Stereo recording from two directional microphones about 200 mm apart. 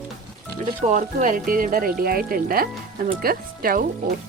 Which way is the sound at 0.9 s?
40° right (ahead or behind).